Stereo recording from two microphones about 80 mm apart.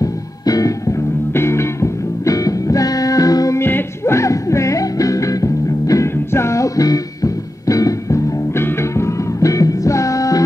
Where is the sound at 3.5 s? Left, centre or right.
Left.